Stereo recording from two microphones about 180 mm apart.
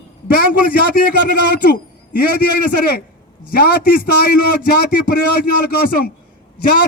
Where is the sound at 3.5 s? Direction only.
55° left (ahead or behind).